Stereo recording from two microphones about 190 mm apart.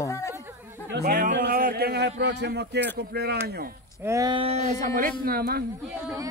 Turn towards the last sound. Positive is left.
turn(degrees=-55)  # may be behind; listen again after turning